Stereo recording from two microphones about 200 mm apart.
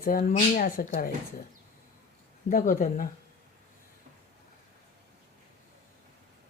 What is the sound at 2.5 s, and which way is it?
Speech, 45° left (ahead or behind).